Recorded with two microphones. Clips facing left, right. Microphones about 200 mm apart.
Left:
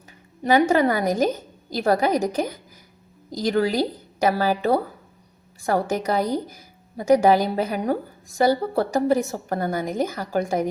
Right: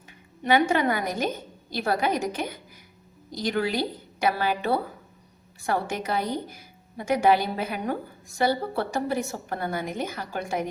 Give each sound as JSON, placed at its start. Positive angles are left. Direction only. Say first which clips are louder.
{"t": 0.4, "sound": "a woman's voice", "louder": "left 4 dB", "side_deg": 40}